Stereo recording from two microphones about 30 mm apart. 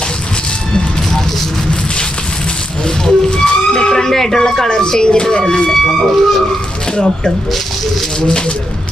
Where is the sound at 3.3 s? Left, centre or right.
Left.